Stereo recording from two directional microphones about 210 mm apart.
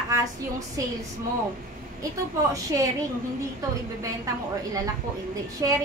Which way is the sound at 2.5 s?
15° right (ahead or behind).